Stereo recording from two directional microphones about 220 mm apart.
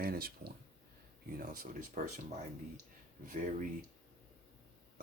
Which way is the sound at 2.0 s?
35° right (ahead or behind).